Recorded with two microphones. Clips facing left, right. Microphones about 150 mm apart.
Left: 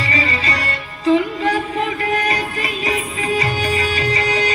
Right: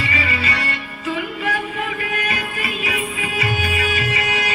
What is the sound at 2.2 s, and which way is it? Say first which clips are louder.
Music: left 4 dB; 35° left (ahead or behind).